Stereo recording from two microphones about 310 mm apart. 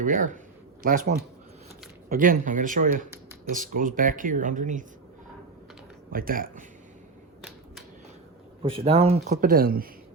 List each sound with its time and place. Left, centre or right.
0.0 s speech: right
6.1 s speech: right
8.6 s speech: centre